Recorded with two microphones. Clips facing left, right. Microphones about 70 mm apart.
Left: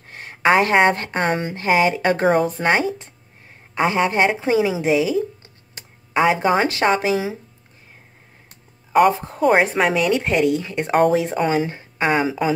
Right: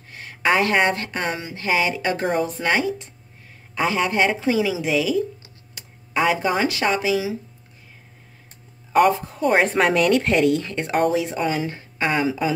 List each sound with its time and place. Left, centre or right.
0.1 s speech: left
2.6 s speech: left
9.4 s a woman's voice: centre
11.1 s speech: left